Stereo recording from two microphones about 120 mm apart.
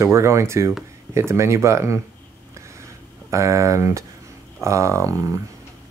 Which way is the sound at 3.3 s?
25° right (ahead or behind).